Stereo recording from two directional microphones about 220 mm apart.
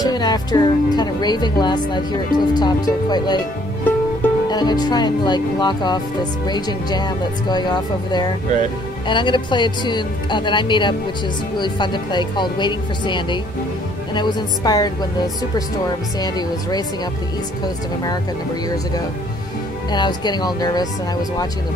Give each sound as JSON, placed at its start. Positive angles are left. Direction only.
{"t": 0.0, "sound": "speech", "side_deg": 20}
{"t": 16.2, "sound": "speech", "side_deg": 20}
{"t": 19.9, "sound": "speech", "side_deg": 20}